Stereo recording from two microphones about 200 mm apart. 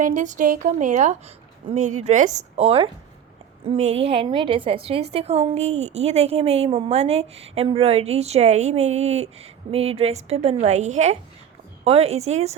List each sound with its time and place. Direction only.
0.0 s a woman's voice: 40° right (ahead or behind)